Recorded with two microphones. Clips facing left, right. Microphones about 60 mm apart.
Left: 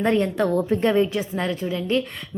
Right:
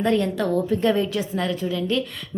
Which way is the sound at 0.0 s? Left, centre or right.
Left.